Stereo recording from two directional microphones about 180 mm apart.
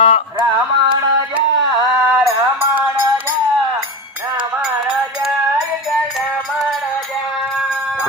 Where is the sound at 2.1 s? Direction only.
Centre (ahead or behind).